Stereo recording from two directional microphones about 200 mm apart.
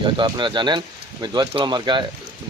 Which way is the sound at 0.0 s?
25° right (ahead or behind).